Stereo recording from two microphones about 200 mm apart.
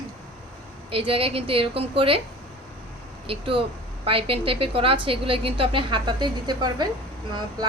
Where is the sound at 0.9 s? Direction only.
25° right (ahead or behind).